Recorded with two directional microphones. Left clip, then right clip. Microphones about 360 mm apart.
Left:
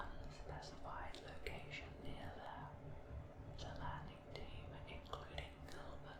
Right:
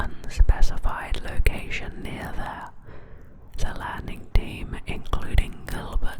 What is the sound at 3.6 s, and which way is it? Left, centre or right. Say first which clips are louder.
Whispering: right 18 dB; right.